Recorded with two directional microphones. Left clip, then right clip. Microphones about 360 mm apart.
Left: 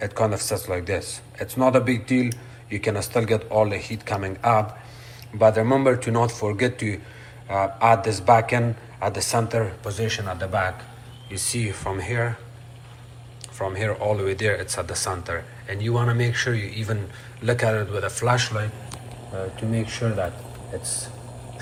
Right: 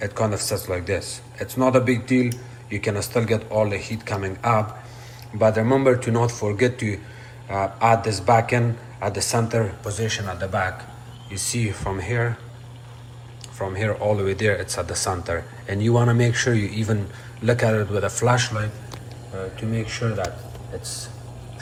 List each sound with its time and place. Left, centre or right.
0.0 s a man's voice: centre
13.6 s speech: centre
20.8 s speech: centre